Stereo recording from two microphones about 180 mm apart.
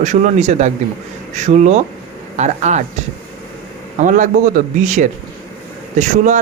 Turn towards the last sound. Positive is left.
turn(degrees=-45)  # may be behind; listen again after turning